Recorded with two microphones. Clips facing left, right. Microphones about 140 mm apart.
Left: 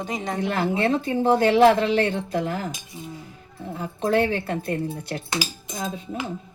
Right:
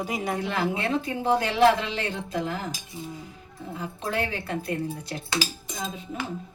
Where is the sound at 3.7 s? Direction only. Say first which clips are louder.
Left 8 dB; 45° left (ahead or behind).